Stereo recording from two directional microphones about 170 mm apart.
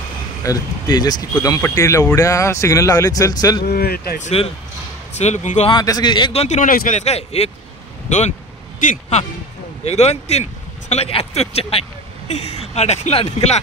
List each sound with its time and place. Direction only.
0.4 s speech: 20° left (ahead or behind)
3.6 s speech: 65° left (ahead or behind)
4.2 s speech: 35° left (ahead or behind)
5.7 s speech: 25° left (ahead or behind)
6.4 s speech: 45° left (ahead or behind)
8.8 s speech: 50° left (ahead or behind)
9.8 s speech: 40° left (ahead or behind)